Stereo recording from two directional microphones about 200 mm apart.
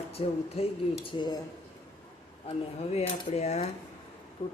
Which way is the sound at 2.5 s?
30° left (ahead or behind).